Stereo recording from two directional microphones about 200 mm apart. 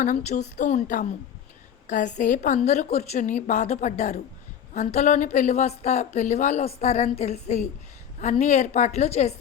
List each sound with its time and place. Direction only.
0.0 s a woman's voice: 35° left (ahead or behind)